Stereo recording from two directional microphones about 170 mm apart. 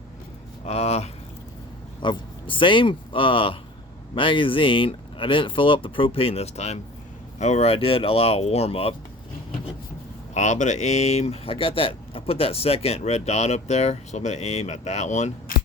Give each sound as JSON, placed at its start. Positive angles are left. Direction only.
{"t": 0.6, "sound": "speech", "side_deg": 40}
{"t": 10.3, "sound": "speech", "side_deg": 45}